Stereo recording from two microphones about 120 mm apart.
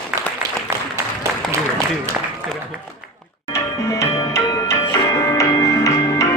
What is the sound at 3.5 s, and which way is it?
Music, 25° left (ahead or behind).